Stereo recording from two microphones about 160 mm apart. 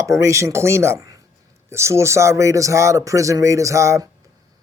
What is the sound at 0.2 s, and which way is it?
Speech, 20° right (ahead or behind).